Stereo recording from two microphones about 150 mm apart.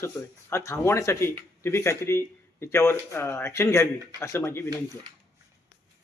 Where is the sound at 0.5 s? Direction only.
20° left (ahead or behind).